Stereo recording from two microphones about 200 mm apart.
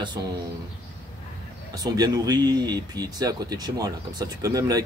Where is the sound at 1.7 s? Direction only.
20° right (ahead or behind).